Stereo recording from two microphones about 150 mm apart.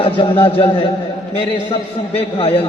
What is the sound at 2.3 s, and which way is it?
Speech, 40° left (ahead or behind).